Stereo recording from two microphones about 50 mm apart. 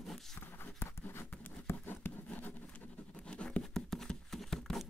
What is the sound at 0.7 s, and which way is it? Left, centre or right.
Writing, left.